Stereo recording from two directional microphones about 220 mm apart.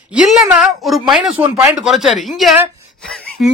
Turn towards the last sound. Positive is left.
turn(degrees=0)  # may be behind; listen again after turning